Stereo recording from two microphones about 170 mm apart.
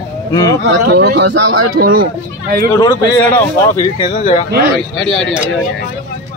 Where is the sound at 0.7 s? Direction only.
75° right (ahead or behind); by 2.1 s 60° right (ahead or behind).